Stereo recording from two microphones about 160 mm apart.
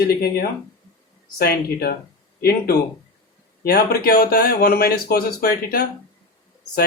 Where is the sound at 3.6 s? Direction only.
75° left (ahead or behind).